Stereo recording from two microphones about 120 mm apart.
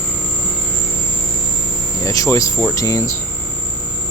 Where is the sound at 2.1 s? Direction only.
30° left (ahead or behind).